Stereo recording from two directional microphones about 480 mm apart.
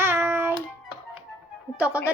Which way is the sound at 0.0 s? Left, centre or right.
Centre.